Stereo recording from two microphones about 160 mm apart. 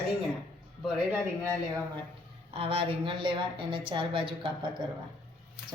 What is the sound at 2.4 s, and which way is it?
A woman's voice, 35° right (ahead or behind).